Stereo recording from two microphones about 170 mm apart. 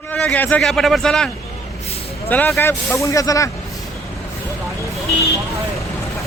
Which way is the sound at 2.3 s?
10° left (ahead or behind).